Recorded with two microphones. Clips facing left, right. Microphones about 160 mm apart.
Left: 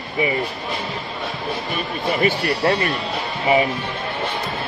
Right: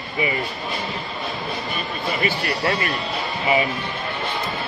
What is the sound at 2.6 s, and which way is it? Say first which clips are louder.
Speech: left 4 dB; 40° left (ahead or behind).